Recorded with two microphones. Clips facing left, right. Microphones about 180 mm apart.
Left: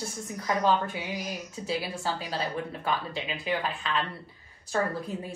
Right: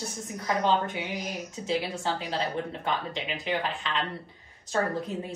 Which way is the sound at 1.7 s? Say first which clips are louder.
Right 2 dB; 25° right (ahead or behind).